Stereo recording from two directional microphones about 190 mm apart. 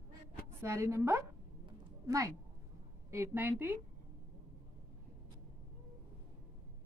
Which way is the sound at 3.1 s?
10° right (ahead or behind).